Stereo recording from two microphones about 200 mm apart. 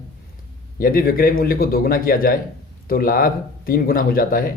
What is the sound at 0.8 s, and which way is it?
Speech, 45° left (ahead or behind).